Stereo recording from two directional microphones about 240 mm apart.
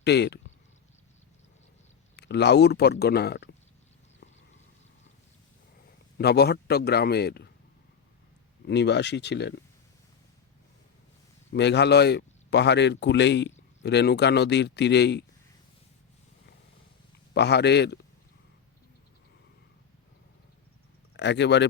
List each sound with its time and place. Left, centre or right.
0.0 s speech: left
2.1 s speech: left
6.1 s speech: left
8.6 s speech: left
11.5 s speech: left
17.3 s speech: left
21.2 s speech: left